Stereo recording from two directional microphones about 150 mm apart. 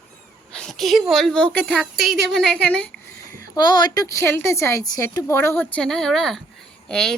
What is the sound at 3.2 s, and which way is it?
A woman's voice, 20° left (ahead or behind).